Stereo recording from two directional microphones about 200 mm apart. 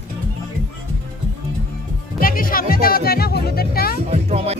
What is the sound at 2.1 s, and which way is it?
Music, 45° left (ahead or behind).